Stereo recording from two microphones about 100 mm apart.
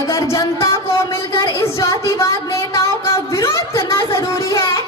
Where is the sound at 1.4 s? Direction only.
35° left (ahead or behind).